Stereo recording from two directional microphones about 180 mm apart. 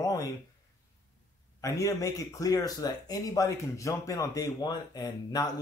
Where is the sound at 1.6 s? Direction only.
20° left (ahead or behind).